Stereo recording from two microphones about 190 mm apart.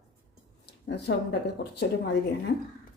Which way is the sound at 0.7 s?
60° left (ahead or behind).